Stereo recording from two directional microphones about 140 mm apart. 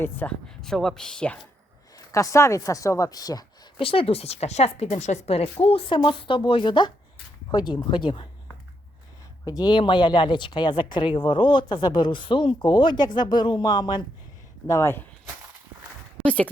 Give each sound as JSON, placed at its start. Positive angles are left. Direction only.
{"t": 0.0, "sound": "speech", "side_deg": 10}
{"t": 2.0, "sound": "speech", "side_deg": 25}
{"t": 3.8, "sound": "speech", "side_deg": 40}
{"t": 9.4, "sound": "speech", "side_deg": 30}
{"t": 14.7, "sound": "speech", "side_deg": 20}
{"t": 16.2, "sound": "speech", "side_deg": 10}